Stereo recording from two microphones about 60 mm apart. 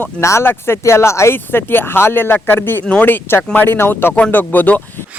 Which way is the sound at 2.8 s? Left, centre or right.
Left.